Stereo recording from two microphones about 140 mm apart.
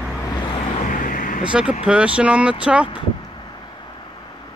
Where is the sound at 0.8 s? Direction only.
70° left (ahead or behind).